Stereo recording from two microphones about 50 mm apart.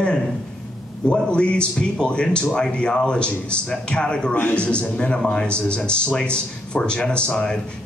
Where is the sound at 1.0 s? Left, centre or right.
Left.